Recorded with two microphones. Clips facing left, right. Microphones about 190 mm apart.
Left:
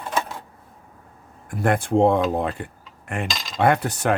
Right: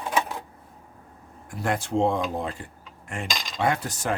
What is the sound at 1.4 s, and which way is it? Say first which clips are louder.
Speech: left 6 dB; 55° left (ahead or behind).